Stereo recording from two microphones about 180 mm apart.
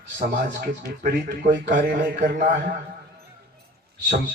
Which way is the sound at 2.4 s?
45° right (ahead or behind).